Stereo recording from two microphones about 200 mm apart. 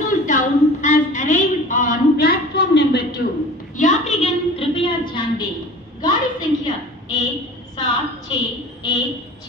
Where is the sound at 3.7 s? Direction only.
35° left (ahead or behind).